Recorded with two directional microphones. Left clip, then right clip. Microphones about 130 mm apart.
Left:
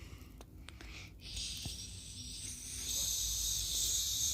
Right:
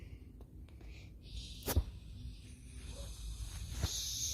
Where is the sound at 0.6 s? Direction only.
25° left (ahead or behind).